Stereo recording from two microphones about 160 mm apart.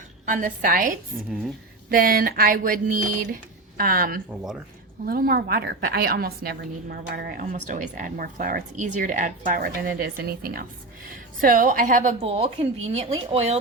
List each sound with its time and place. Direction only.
0.3 s a woman's voice: 55° right (ahead or behind)
11.3 s speech: 55° right (ahead or behind)
12.2 s speech: 40° right (ahead or behind)